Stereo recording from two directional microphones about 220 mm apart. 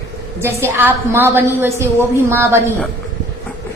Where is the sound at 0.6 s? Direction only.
10° right (ahead or behind).